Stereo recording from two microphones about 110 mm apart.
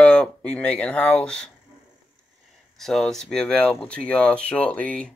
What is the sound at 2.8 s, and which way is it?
Speech, centre (ahead or behind).